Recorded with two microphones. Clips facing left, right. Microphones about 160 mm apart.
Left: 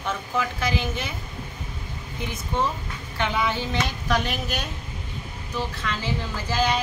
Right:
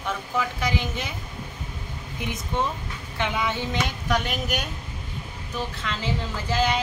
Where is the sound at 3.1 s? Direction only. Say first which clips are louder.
Left 1 dB; 20° right (ahead or behind).